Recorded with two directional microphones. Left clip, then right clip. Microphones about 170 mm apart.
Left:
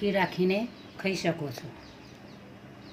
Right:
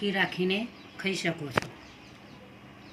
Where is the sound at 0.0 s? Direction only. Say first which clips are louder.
Left 1 dB; 20° left (ahead or behind).